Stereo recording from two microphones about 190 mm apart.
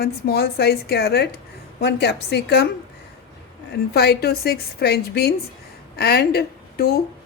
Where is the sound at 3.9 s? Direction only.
55° left (ahead or behind).